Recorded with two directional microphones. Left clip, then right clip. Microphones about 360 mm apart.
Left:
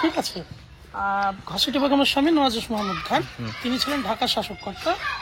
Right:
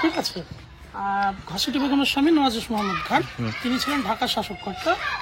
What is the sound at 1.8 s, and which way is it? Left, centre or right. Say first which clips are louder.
Speech: left 2 dB; centre.